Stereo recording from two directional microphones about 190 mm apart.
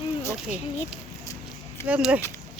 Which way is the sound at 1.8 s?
5° right (ahead or behind).